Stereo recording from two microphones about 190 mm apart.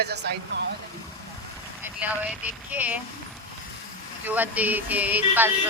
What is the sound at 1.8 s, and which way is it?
Speech, 10° right (ahead or behind).